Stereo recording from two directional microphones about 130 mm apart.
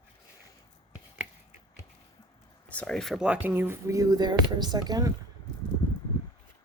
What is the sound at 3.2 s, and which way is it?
A woman's voice, 15° right (ahead or behind).